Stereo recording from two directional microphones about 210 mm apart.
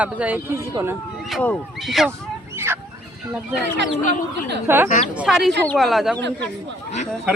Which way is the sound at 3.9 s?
40° left (ahead or behind).